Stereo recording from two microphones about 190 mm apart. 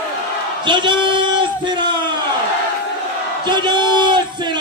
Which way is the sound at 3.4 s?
25° right (ahead or behind).